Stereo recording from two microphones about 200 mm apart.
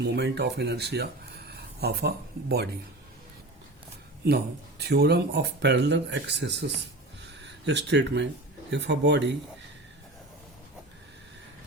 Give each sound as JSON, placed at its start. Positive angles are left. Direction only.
{"t": 0.0, "sound": "speech", "side_deg": -55}
{"t": 4.8, "sound": "speech", "side_deg": -55}